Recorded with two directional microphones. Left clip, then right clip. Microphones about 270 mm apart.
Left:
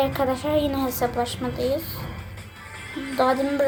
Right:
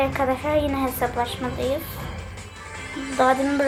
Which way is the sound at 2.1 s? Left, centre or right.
Right.